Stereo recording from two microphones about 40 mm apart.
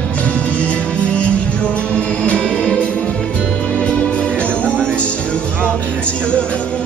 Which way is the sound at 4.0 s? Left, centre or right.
Left.